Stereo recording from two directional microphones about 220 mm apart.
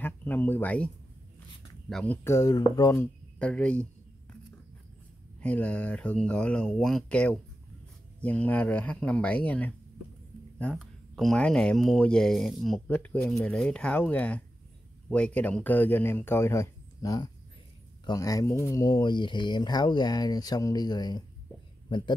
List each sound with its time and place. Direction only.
0.0 s speech: 10° left (ahead or behind)
5.4 s speech: 5° left (ahead or behind); by 22.1 s 20° left (ahead or behind)